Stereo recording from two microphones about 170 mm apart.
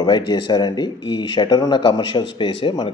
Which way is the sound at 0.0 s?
25° left (ahead or behind).